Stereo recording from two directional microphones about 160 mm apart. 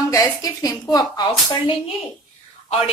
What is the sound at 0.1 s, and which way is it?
A woman's voice, 25° left (ahead or behind).